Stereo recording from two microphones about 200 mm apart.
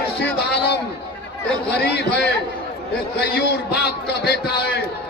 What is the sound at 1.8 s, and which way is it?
A man's voice, 55° left (ahead or behind).